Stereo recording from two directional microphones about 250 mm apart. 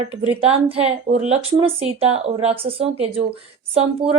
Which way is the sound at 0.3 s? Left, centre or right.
Right.